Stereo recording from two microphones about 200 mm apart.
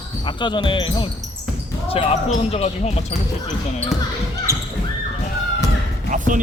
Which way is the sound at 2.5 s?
30° left (ahead or behind).